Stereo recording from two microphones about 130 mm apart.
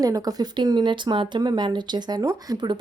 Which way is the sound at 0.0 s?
30° right (ahead or behind).